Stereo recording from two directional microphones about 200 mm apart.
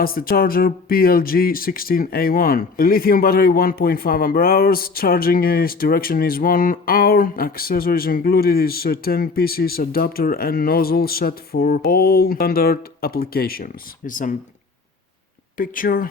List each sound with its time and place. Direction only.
0.0 s speech: 45° left (ahead or behind)
15.5 s speech: 45° left (ahead or behind)